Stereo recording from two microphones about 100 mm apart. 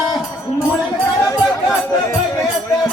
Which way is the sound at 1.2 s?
30° left (ahead or behind).